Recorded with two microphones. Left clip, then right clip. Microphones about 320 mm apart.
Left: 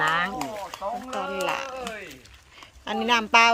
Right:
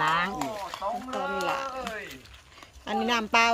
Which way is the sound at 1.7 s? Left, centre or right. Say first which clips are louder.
Even; left.